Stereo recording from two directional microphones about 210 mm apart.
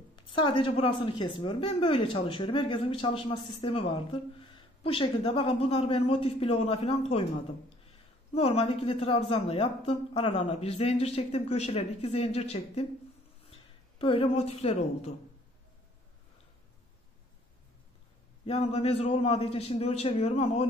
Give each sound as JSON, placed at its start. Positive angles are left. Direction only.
{"t": 0.1, "sound": "speech", "side_deg": 20}
{"t": 8.4, "sound": "a woman's voice", "side_deg": 30}
{"t": 18.4, "sound": "speech", "side_deg": 30}